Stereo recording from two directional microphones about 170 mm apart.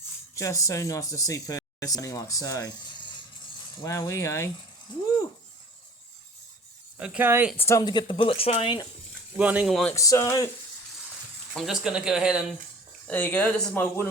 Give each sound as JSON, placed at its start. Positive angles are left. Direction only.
{"t": 0.3, "sound": "speech", "side_deg": 20}
{"t": 3.8, "sound": "speech", "side_deg": 20}
{"t": 7.0, "sound": "speech", "side_deg": -10}
{"t": 7.5, "sound": "speech", "side_deg": 15}
{"t": 9.4, "sound": "speech", "side_deg": -10}
{"t": 9.9, "sound": "speech", "side_deg": 20}
{"t": 11.5, "sound": "speech", "side_deg": 0}
{"t": 13.1, "sound": "speech", "side_deg": 10}